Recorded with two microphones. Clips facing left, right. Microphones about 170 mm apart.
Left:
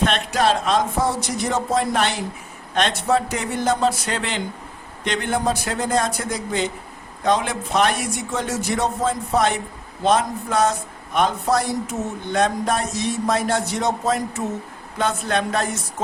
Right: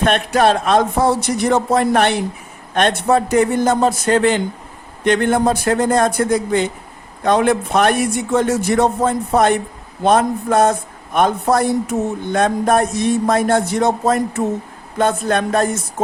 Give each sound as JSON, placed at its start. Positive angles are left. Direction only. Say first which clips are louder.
{"t": 0.0, "sound": "a man's voice", "louder": "right 5 dB", "side_deg": -55}